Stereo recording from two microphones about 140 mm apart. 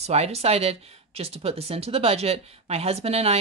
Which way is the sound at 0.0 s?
50° right (ahead or behind).